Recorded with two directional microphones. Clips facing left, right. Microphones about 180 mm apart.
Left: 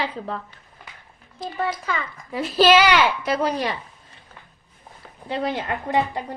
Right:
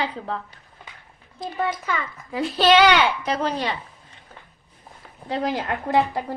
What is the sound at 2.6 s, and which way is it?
Speech, 5° left (ahead or behind).